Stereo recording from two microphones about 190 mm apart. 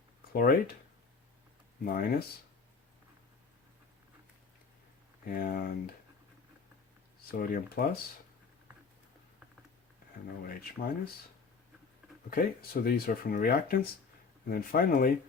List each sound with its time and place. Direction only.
0.3 s speech: 50° left (ahead or behind)
1.8 s speech: 50° left (ahead or behind)
5.3 s speech: 50° left (ahead or behind)
7.3 s speech: 50° left (ahead or behind)
10.4 s speech: 50° left (ahead or behind)
12.3 s speech: 50° left (ahead or behind)